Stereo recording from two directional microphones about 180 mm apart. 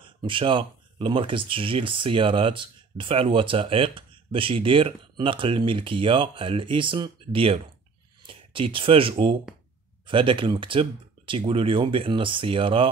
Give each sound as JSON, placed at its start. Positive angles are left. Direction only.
{"t": 0.0, "sound": "speech", "side_deg": -30}